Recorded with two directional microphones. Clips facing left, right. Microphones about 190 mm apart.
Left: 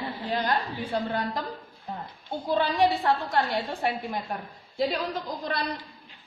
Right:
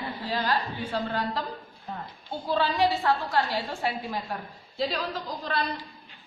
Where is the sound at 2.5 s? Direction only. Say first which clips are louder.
Left 1 dB; 15° left (ahead or behind).